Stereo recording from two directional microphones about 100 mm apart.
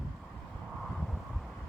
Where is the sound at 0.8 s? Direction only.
Centre (ahead or behind).